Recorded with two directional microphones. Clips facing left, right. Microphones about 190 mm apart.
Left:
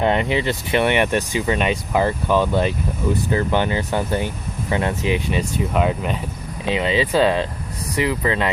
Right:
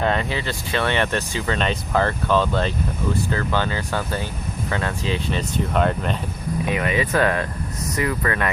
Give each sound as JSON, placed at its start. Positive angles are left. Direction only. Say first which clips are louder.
{"t": 0.0, "sound": "speech", "louder": "left 4 dB", "side_deg": 20}
{"t": 6.7, "sound": "speech", "louder": "left 4 dB", "side_deg": 25}